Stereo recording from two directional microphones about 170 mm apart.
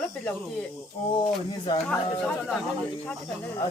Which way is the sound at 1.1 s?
30° left (ahead or behind).